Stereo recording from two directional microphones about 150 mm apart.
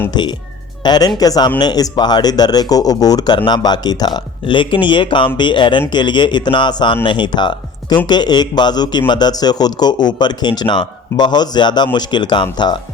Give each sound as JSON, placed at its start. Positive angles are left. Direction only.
{"t": 0.1, "sound": "speech", "side_deg": 30}